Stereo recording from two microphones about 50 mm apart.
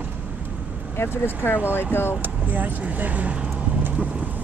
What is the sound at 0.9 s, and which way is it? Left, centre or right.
Speech, left.